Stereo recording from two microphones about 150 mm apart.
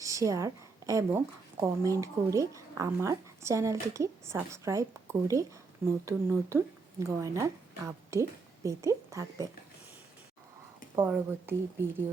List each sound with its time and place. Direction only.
0.0 s speech: 20° right (ahead or behind)
6.1 s speech: 20° right (ahead or behind)
10.9 s speech: 15° right (ahead or behind)